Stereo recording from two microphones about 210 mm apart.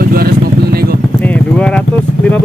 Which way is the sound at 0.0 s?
45° right (ahead or behind).